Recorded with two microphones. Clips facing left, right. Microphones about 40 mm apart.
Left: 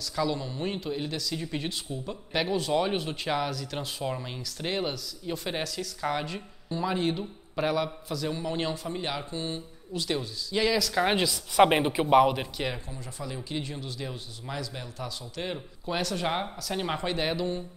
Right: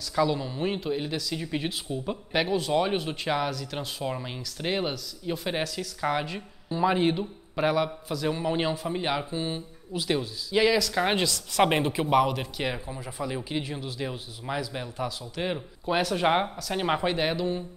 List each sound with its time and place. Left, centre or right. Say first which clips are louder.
0.1 s speech: right 4 dB; centre
6.8 s speech: right 5 dB; centre
7.5 s speech: right 3 dB; centre
11.2 s speech: left 2 dB; centre
12.5 s speech: right 2 dB; centre